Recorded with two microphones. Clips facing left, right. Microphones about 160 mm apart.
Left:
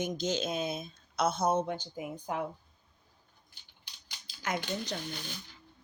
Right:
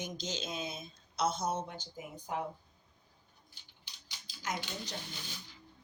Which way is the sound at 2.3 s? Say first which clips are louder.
Left 2 dB; 90° left.